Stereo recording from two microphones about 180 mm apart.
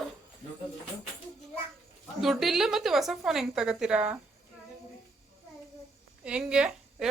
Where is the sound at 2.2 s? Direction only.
Centre (ahead or behind).